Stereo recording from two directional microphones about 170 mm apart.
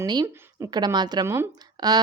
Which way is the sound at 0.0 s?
25° right (ahead or behind).